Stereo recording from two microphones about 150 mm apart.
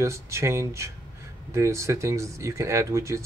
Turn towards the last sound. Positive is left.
turn(degrees=-20)  # may be behind; listen again after turning